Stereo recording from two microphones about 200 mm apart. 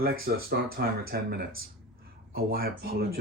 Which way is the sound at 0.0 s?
50° right (ahead or behind).